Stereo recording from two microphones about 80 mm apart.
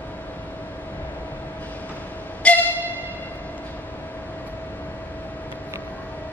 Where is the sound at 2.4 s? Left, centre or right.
Centre.